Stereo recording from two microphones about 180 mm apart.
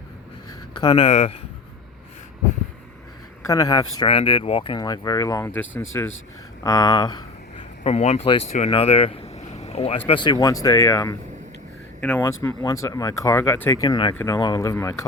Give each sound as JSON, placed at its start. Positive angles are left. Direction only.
{"t": 0.8, "sound": "speech", "side_deg": 25}
{"t": 3.4, "sound": "speech", "side_deg": 20}
{"t": 7.9, "sound": "speech", "side_deg": 35}
{"t": 11.9, "sound": "speech", "side_deg": 5}